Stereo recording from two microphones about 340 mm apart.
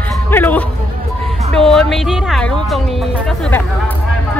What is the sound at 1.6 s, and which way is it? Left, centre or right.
Speech, centre.